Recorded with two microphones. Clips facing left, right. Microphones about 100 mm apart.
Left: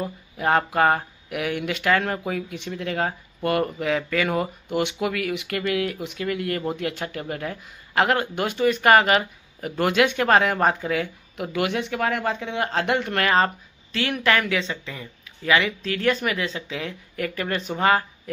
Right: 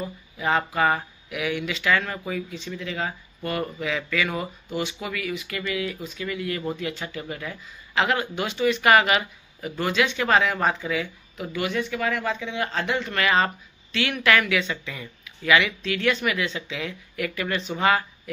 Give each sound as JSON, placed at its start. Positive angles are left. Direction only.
{"t": 0.0, "sound": "speech", "side_deg": 55}